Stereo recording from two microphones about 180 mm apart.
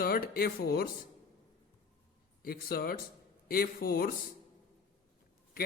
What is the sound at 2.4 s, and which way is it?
Speech, 55° left (ahead or behind).